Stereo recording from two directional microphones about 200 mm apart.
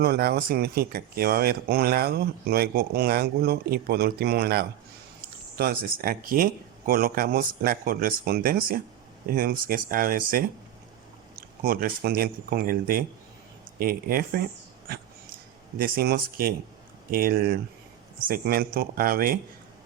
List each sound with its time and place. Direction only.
0.0 s speech: 50° right (ahead or behind)
15.8 s speech: 50° right (ahead or behind)